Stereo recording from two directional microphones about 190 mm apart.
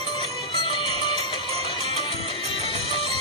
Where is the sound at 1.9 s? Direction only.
30° left (ahead or behind).